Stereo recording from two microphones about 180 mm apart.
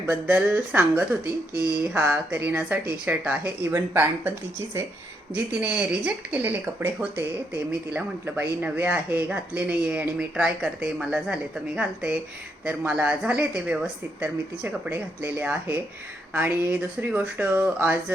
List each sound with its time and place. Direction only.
0.0 s speech: 10° right (ahead or behind)
1.2 s speech: 20° left (ahead or behind)
1.8 s speech: 10° right (ahead or behind)
5.5 s speech: 5° right (ahead or behind)